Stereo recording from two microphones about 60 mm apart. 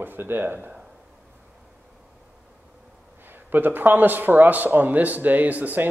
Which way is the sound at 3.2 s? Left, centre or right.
Right.